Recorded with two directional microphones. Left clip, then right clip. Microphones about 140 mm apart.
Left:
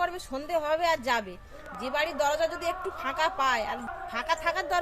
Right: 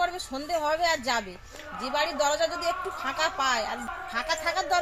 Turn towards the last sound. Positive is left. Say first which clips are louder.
# right 1 dB
turn(degrees=40)  # may be behind; listen again after turning